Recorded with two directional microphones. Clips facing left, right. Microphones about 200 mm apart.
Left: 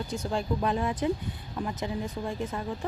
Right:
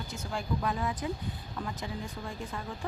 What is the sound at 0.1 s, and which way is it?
Speech, 30° left (ahead or behind).